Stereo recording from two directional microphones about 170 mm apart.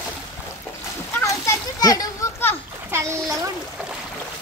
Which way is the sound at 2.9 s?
15° right (ahead or behind).